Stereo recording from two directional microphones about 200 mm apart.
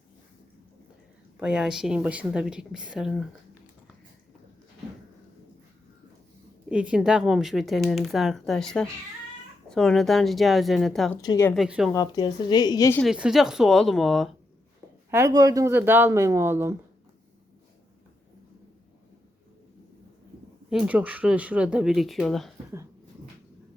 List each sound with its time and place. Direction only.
1.4 s speech: 5° right (ahead or behind)
6.7 s speech: 5° right (ahead or behind)
11.2 s speech: 15° left (ahead or behind)
11.5 s speech: centre (ahead or behind)
11.9 s a woman's voice: 20° left (ahead or behind)
13.0 s speech: 5° right (ahead or behind)
15.1 s speech: 15° right (ahead or behind)
20.7 s speech: 5° right (ahead or behind)